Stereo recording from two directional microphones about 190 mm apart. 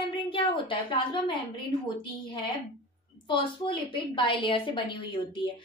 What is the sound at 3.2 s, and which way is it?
A woman's voice, 25° left (ahead or behind).